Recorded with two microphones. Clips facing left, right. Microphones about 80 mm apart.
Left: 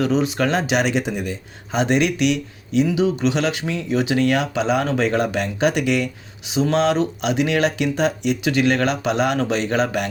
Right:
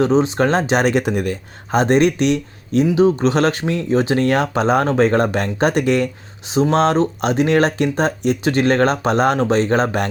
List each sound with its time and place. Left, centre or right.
0.0 s speech: right